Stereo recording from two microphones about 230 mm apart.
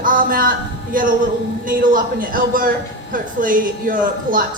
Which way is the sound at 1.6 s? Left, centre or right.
Right.